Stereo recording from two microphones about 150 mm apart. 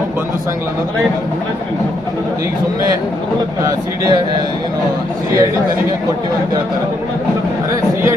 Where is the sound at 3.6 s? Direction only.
25° right (ahead or behind).